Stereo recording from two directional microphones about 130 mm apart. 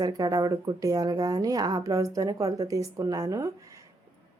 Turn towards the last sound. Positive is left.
turn(degrees=-30)  # may be behind; listen again after turning